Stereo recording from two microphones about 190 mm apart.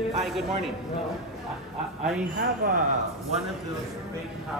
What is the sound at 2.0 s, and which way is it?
Speech, 5° right (ahead or behind).